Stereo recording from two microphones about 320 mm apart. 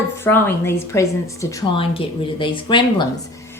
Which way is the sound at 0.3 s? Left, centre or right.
Centre.